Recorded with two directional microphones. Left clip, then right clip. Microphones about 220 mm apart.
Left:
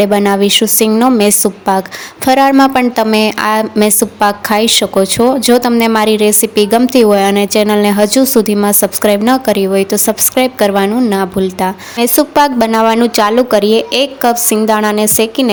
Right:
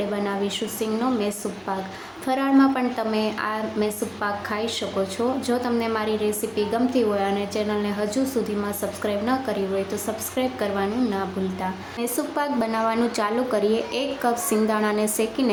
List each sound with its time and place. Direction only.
0.0 s a woman's voice: 50° left (ahead or behind)